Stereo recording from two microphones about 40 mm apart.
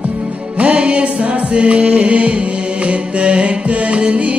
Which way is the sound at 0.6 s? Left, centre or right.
Right.